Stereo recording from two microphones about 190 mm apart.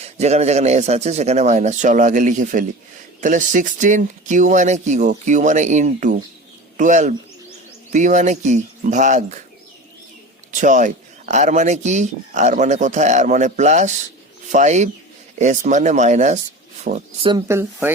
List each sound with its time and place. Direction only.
0.0 s speech: 35° right (ahead or behind)
10.5 s speech: 40° right (ahead or behind)
16.9 s speech: 55° right (ahead or behind)
17.2 s speech: 25° right (ahead or behind)